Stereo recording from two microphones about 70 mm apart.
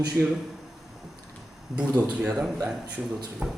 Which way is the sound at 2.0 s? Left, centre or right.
Centre.